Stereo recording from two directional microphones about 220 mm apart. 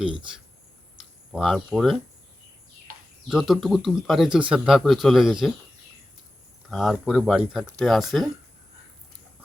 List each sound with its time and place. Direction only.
1.3 s speech: centre (ahead or behind)
3.2 s speech: centre (ahead or behind)
6.7 s speech: centre (ahead or behind)